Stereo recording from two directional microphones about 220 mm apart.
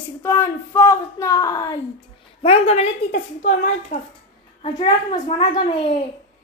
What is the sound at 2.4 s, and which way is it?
A woman's voice, 25° left (ahead or behind).